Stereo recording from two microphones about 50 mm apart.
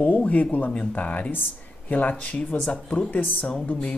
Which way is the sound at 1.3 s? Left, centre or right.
Left.